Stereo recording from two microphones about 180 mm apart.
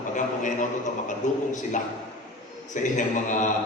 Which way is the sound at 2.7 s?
45° left (ahead or behind).